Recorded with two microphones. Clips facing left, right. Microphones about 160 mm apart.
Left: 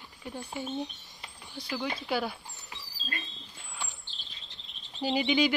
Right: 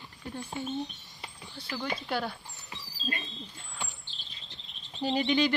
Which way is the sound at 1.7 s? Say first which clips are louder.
Left 1 dB; centre (ahead or behind).